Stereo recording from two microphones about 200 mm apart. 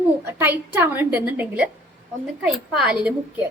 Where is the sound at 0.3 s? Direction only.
10° right (ahead or behind).